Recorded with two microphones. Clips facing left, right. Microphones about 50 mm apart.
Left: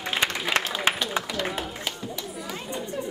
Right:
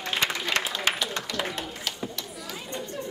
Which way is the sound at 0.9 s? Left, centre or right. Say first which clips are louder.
Left 2 dB; left.